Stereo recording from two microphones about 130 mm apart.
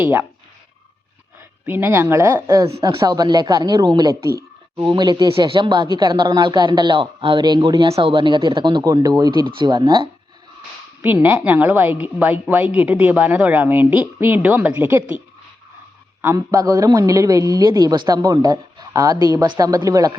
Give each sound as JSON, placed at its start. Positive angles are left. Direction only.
{"t": 0.0, "sound": "a man's voice", "side_deg": -15}
{"t": 1.4, "sound": "speech", "side_deg": -15}
{"t": 7.9, "sound": "speech", "side_deg": -45}
{"t": 9.6, "sound": "speech", "side_deg": -40}
{"t": 11.0, "sound": "a man's voice", "side_deg": -15}
{"t": 16.2, "sound": "speech", "side_deg": -25}